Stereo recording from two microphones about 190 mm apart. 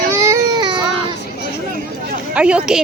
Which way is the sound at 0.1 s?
15° right (ahead or behind).